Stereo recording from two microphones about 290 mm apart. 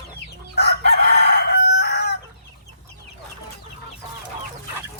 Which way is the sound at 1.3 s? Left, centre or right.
Left.